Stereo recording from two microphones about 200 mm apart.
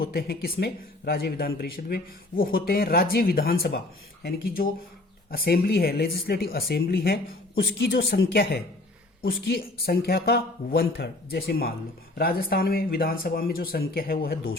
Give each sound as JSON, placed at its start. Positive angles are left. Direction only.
{"t": 0.0, "sound": "a man's voice", "side_deg": 50}